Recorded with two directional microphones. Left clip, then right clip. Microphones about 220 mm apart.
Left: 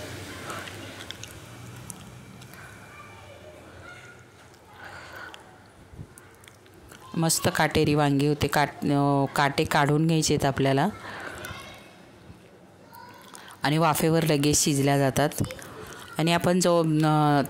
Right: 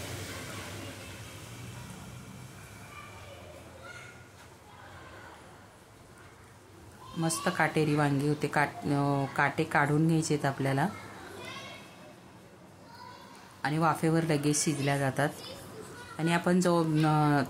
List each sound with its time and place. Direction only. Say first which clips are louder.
7.2 s speech: left 5 dB; 45° left (ahead or behind)
13.6 s speech: left 5 dB; 45° left (ahead or behind)